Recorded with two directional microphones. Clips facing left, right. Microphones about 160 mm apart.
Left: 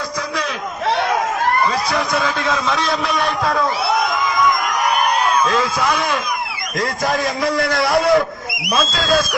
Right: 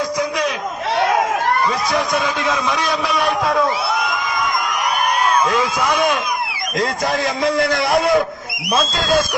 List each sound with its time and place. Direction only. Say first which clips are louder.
1.9 s a man's voice: even; 15° right (ahead or behind)
5.5 s a man's voice: even; 20° right (ahead or behind)